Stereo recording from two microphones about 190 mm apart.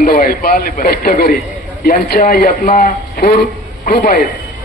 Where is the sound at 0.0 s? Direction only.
50° left (ahead or behind).